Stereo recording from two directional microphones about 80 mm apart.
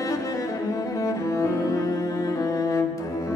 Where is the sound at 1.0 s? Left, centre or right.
Left.